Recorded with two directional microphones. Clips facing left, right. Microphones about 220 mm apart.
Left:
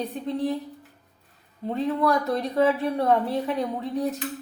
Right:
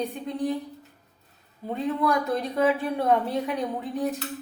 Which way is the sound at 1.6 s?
Centre (ahead or behind).